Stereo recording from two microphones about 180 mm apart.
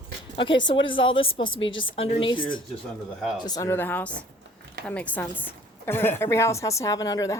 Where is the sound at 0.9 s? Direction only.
30° left (ahead or behind).